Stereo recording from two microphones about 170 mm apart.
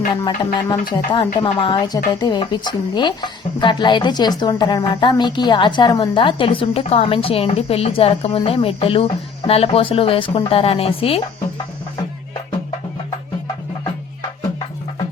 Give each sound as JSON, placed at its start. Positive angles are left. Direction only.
{"t": 0.1, "sound": "a woman's voice", "side_deg": 25}